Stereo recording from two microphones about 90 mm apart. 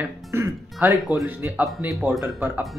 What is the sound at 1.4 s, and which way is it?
Speech, 20° right (ahead or behind).